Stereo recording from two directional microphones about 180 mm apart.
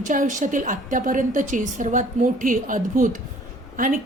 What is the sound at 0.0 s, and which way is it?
A woman's voice, 45° right (ahead or behind).